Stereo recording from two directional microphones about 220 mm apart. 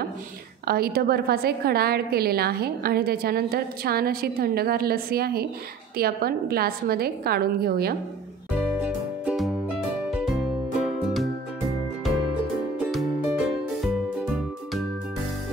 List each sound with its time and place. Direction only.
0.7 s a woman's voice: 45° right (ahead or behind)
8.5 s music: 5° right (ahead or behind)
12.7 s music: 5° right (ahead or behind)